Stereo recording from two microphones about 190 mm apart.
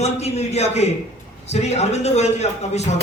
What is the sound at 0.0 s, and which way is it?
Speech, 35° left (ahead or behind).